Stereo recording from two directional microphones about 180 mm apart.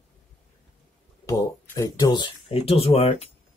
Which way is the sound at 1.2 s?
15° left (ahead or behind).